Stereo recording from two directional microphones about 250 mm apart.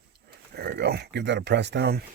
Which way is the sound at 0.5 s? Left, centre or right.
Right.